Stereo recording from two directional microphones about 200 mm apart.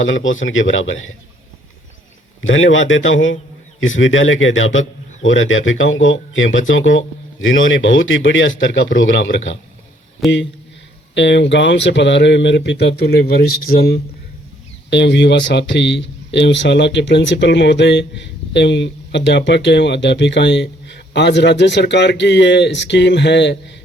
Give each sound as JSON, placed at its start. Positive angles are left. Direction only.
{"t": 0.0, "sound": "a man's voice", "side_deg": 70}
{"t": 2.4, "sound": "a man's voice", "side_deg": 75}
{"t": 14.8, "sound": "a man's voice", "side_deg": 60}